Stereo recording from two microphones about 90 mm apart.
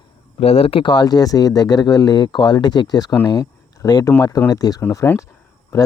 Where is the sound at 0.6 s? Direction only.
85° left; by 4.8 s 45° left (ahead or behind).